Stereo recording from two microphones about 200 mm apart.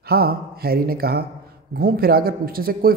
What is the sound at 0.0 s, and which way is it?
Speech, 50° right (ahead or behind).